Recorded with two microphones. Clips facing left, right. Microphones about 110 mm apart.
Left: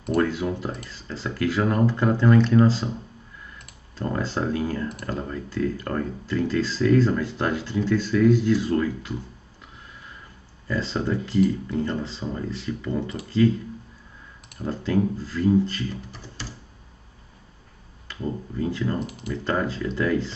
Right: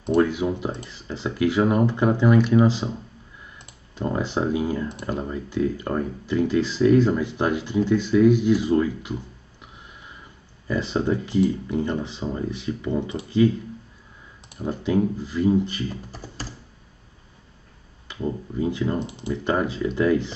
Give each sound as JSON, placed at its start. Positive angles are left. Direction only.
{"t": 0.2, "sound": "speech", "side_deg": -15}
{"t": 10.7, "sound": "speech", "side_deg": -15}
{"t": 14.6, "sound": "speech", "side_deg": -15}
{"t": 16.1, "sound": "computer keyboard", "side_deg": -40}
{"t": 18.0, "sound": "speech", "side_deg": -15}